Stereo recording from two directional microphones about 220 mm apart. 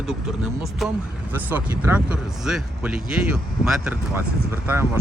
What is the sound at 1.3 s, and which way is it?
Speech, 10° right (ahead or behind).